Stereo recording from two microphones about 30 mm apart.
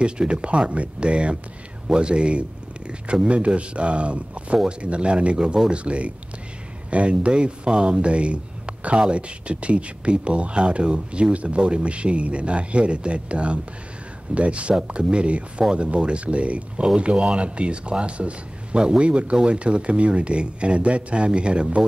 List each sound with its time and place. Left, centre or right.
0.0 s speech: right